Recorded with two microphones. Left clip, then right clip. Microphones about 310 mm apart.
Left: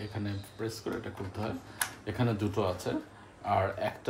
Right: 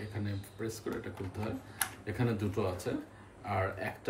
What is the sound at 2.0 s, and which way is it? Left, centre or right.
Speech, centre.